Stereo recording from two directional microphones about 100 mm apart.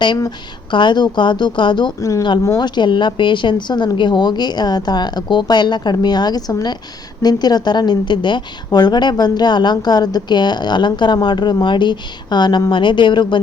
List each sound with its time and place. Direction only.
0.3 s a woman's voice: 50° left (ahead or behind)
2.0 s speech: 35° left (ahead or behind)
2.6 s a woman's voice: 50° left (ahead or behind)